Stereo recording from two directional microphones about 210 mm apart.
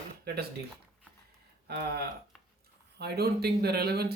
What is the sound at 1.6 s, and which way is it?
Speech, 50° right (ahead or behind).